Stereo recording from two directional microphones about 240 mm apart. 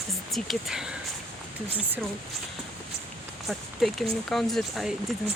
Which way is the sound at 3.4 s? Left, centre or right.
Centre.